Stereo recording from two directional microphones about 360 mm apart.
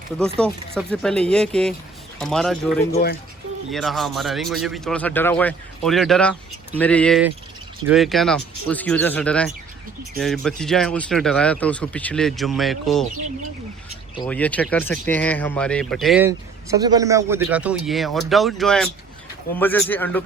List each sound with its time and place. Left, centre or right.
0.3 s speech: centre
2.9 s speech: left
3.7 s speech: centre
14.2 s speech: centre